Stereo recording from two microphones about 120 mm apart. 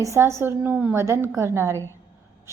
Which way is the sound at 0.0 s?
25° right (ahead or behind).